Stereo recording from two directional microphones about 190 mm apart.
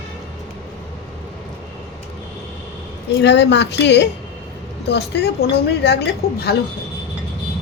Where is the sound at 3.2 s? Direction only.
65° left (ahead or behind).